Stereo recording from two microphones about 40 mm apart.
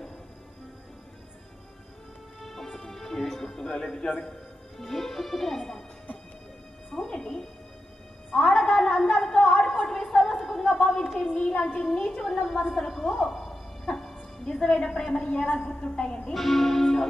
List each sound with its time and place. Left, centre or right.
2.4 s music: centre
4.7 s speech: centre
6.9 s music: centre
8.5 s a sound: centre
11.3 s a woman's voice: centre
12.9 s music: centre
14.4 s a woman's voice: centre
15.1 s a woman's voice: left
16.3 s speech: centre